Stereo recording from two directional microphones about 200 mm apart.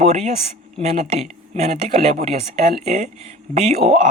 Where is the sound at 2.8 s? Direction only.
35° right (ahead or behind).